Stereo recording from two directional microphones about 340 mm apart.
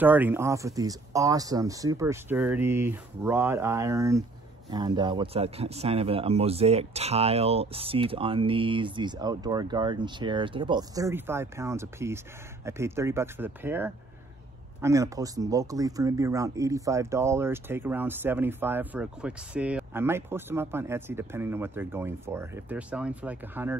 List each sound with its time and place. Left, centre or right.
0.0 s speech: centre